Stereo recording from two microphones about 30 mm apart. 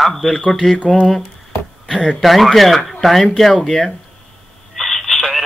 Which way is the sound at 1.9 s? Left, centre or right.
Right.